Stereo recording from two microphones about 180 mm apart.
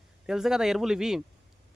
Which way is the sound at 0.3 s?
5° right (ahead or behind).